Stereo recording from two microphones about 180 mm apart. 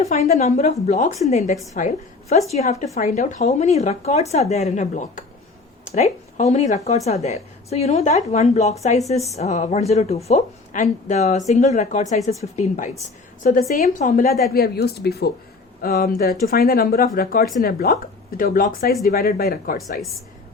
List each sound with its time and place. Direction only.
0.0 s speech: 40° left (ahead or behind)
1.7 s a woman's voice: 50° left (ahead or behind)